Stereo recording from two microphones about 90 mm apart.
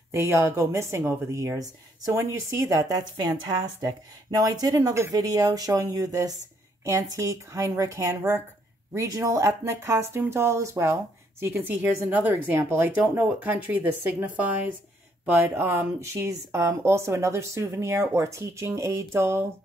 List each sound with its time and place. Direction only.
0.1 s speech: 25° right (ahead or behind)
11.5 s speech: 20° right (ahead or behind)